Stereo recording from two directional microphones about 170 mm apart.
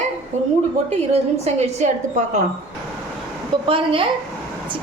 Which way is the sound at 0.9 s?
40° right (ahead or behind).